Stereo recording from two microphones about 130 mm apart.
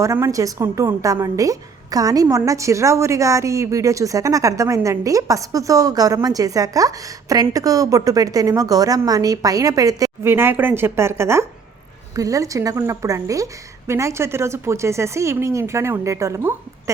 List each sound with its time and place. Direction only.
0.0 s a woman's voice: 25° right (ahead or behind)